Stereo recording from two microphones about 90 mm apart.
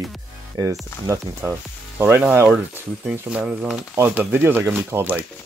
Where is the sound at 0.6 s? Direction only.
35° right (ahead or behind); by 3.8 s 15° right (ahead or behind).